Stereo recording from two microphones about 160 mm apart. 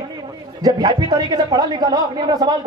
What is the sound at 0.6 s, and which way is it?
A man's voice, 25° right (ahead or behind).